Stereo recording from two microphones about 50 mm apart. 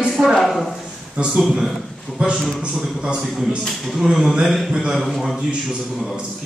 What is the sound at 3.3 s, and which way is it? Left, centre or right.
A man's voice, centre.